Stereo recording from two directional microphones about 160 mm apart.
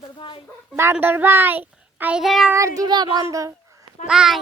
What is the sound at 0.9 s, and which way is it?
A child's voice, 10° right (ahead or behind).